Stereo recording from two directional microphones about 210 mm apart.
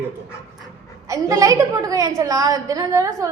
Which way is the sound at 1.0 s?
15° right (ahead or behind).